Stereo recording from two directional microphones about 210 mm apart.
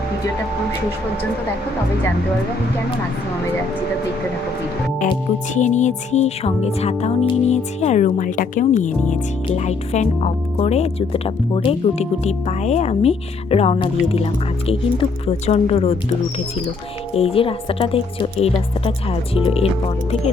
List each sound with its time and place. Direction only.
5.5 s speech: 35° left (ahead or behind)
17.2 s speech: 25° left (ahead or behind)